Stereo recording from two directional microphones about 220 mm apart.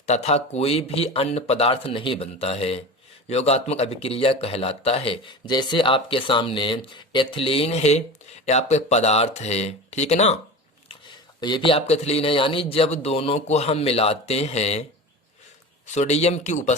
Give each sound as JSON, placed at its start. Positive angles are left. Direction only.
{"t": 0.0, "sound": "speech", "side_deg": 30}
{"t": 10.8, "sound": "speech", "side_deg": 20}
{"t": 16.0, "sound": "speech", "side_deg": 30}